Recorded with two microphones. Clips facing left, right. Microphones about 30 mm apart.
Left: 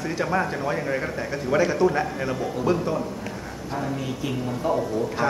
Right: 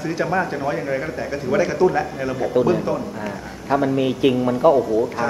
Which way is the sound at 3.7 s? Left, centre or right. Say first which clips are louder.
Right 11 dB; right.